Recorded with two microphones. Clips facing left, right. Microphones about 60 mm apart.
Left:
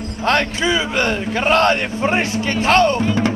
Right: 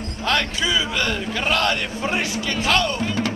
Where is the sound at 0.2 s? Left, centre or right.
Left.